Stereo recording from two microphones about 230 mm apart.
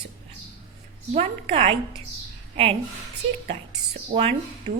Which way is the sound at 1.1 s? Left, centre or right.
Right.